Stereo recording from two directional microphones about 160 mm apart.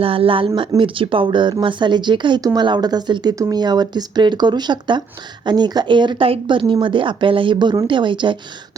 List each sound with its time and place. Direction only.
0.0 s speech: 35° right (ahead or behind)